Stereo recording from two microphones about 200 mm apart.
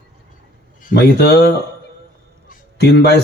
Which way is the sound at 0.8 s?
45° left (ahead or behind).